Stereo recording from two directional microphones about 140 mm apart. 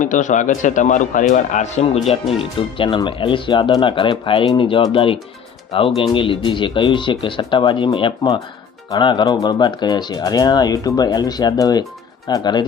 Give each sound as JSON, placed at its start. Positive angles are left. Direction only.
{"t": 0.0, "sound": "speech", "side_deg": 65}
{"t": 2.3, "sound": "speech", "side_deg": 40}